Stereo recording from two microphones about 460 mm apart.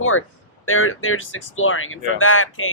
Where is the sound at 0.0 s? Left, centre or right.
Left.